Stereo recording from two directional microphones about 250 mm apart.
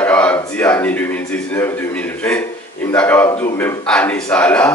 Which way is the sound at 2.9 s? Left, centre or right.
Centre.